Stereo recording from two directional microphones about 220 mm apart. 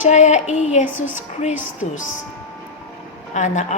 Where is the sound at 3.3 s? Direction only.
35° left (ahead or behind).